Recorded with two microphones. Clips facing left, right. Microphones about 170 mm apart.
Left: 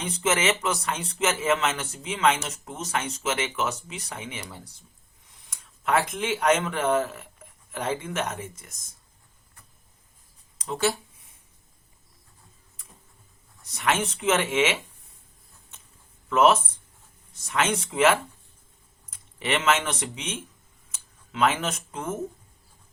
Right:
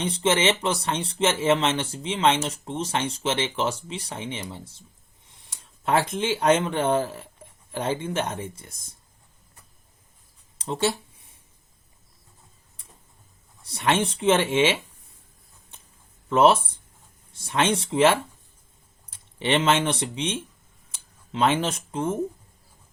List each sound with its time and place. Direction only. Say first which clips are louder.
0.0 s speech: right 3 dB; 30° right (ahead or behind)
10.6 s speech: right 1 dB; 30° right (ahead or behind)
13.6 s speech: right 3 dB; 30° right (ahead or behind)
16.3 s speech: right 2 dB; 30° right (ahead or behind)